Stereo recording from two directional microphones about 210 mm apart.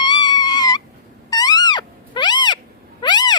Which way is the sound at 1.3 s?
15° left (ahead or behind).